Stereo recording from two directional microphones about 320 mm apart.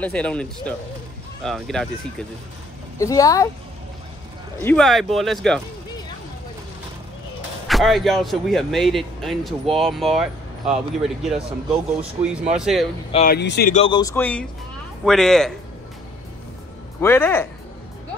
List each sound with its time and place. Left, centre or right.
0.0 s speech: centre
3.0 s speech: centre
4.6 s speech: centre
7.6 s speech: centre
13.1 s speech: left; by 15.5 s centre
17.0 s speech: centre